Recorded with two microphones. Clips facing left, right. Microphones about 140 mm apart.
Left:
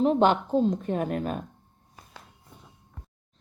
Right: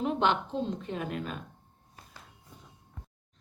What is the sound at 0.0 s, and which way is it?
A woman's voice, 40° left (ahead or behind).